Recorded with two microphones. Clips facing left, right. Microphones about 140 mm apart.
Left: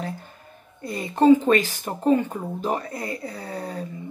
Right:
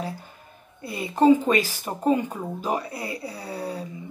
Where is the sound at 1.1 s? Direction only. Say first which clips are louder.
Left 2 dB; 10° right (ahead or behind).